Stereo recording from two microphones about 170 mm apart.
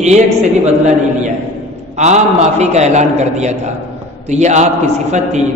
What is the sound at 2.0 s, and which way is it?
A man's voice, 40° right (ahead or behind).